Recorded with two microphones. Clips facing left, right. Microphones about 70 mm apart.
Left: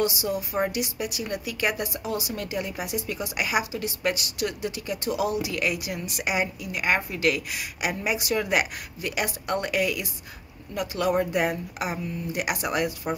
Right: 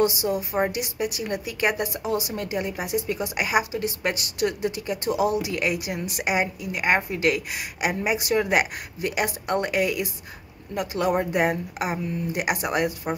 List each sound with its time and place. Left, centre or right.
0.0 s a woman's voice: right